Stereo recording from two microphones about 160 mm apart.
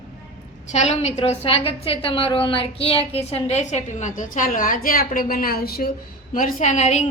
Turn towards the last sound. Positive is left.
turn(degrees=45)  # may be behind; listen again after turning